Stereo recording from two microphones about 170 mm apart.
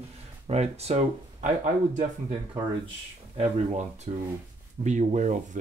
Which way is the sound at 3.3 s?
40° right (ahead or behind).